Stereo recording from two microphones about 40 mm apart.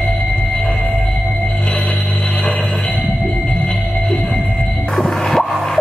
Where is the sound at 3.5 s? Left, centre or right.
Left.